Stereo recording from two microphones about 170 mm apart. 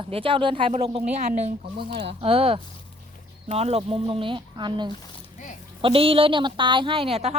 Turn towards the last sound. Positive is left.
turn(degrees=-35)  # may be behind; listen again after turning